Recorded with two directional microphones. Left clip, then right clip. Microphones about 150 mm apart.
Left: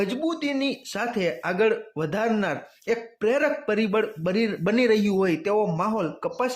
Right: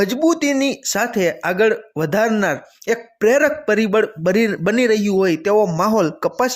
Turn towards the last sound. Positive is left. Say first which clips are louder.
# right 9 dB
turn(degrees=-50)  # may be behind; listen again after turning